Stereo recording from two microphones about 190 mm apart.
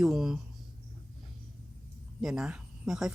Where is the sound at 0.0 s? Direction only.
Centre (ahead or behind).